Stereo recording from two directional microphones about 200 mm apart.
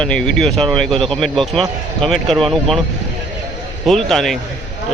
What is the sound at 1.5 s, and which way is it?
Speech, 25° right (ahead or behind).